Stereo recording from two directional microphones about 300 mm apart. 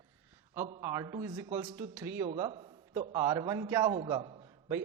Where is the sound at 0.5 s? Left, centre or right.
Centre.